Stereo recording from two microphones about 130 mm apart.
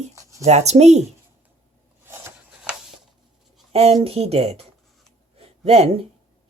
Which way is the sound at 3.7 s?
55° right (ahead or behind).